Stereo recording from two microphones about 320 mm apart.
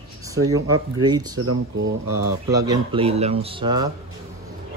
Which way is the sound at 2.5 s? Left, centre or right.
Centre.